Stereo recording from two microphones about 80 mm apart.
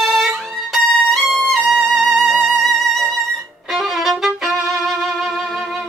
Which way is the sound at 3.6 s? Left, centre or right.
Centre.